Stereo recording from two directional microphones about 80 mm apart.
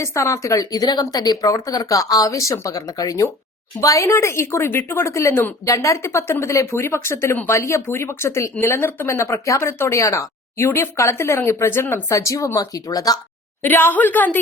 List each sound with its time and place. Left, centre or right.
0.0 s a woman's voice: left
13.6 s a woman's voice: left